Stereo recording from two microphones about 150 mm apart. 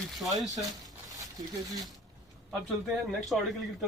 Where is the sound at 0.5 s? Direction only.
25° right (ahead or behind).